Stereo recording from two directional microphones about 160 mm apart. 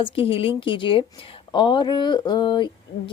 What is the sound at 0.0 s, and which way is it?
A woman's voice, 35° left (ahead or behind).